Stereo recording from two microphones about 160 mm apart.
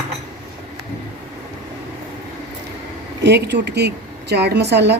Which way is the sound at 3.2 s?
90° right.